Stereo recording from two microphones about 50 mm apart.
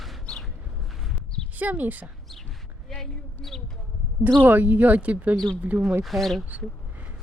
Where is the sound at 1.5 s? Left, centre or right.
Right.